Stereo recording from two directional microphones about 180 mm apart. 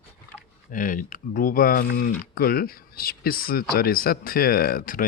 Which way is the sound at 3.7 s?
55° left (ahead or behind).